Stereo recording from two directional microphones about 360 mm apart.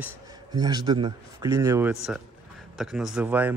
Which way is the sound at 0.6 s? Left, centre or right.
Centre.